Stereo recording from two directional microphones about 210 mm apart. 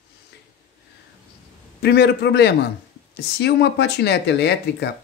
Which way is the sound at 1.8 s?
50° left (ahead or behind).